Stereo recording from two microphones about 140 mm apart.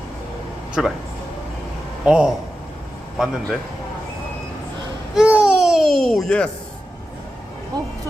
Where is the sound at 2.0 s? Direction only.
5° right (ahead or behind).